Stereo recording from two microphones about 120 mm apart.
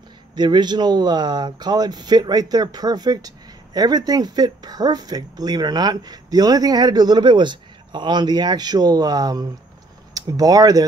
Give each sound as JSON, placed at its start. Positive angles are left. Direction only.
{"t": 0.4, "sound": "speech", "side_deg": -35}